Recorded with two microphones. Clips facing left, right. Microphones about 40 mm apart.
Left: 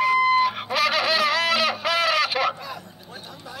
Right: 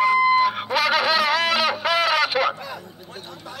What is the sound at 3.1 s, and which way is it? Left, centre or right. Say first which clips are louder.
Chatter: right 2 dB; right.